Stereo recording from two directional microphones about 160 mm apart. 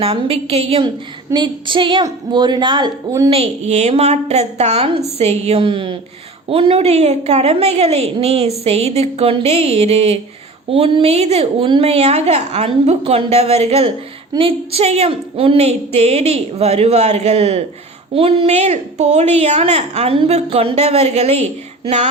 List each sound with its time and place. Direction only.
0.0 s a woman's voice: 35° right (ahead or behind)
3.2 s a woman's voice: 40° right (ahead or behind)
21.8 s a sound: 45° right (ahead or behind)